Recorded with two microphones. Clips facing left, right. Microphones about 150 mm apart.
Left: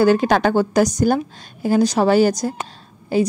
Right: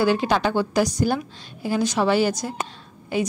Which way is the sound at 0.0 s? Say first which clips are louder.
Left 5 dB; 45° left (ahead or behind).